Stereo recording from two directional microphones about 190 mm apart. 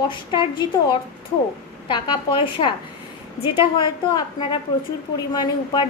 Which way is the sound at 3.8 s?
25° left (ahead or behind).